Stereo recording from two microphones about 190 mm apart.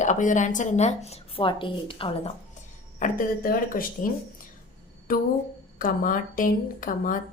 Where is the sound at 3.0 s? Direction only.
45° left (ahead or behind).